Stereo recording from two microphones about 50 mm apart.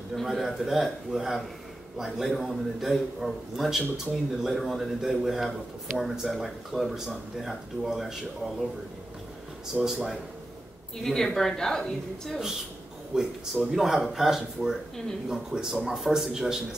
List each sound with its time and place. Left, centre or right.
0.1 s a man's voice: centre
9.7 s speech: centre
11.0 s a woman's voice: centre
13.1 s a man's voice: centre